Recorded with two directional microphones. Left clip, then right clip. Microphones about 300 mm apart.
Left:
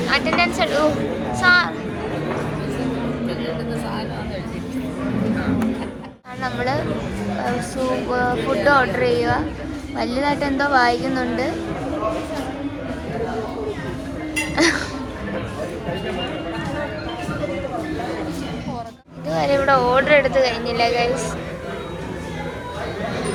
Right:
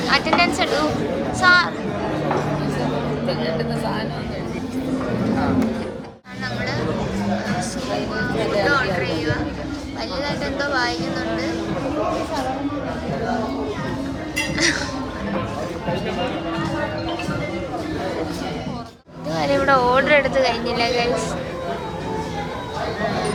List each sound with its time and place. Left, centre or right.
0.1 s speech: centre
8.6 s a woman's voice: centre
14.5 s speech: centre
19.3 s speech: centre